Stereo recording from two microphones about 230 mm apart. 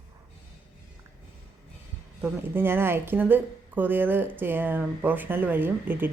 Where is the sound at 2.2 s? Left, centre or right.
Centre.